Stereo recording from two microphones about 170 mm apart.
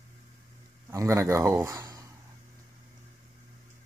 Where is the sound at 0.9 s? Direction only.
20° right (ahead or behind).